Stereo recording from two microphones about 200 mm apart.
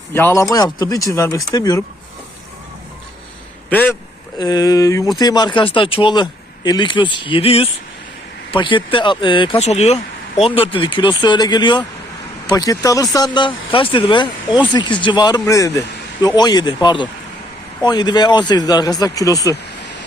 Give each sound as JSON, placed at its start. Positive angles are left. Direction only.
{"t": 0.1, "sound": "speech", "side_deg": 10}
{"t": 3.7, "sound": "speech", "side_deg": 10}
{"t": 4.4, "sound": "speech", "side_deg": 20}